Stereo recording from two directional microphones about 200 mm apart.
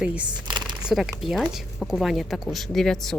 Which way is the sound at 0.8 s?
5° right (ahead or behind).